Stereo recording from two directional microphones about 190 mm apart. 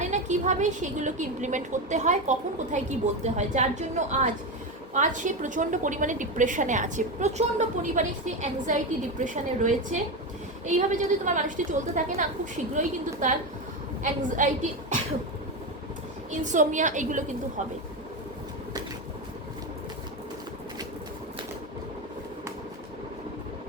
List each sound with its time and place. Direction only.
0.0 s a woman's voice: 40° right (ahead or behind)
16.4 s a woman's voice: 40° right (ahead or behind)